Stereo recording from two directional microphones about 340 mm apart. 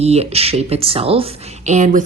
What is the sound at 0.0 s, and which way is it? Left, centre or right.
Speech, centre.